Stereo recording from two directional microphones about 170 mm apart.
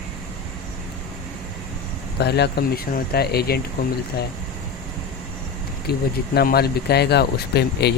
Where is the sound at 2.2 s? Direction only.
75° left (ahead or behind).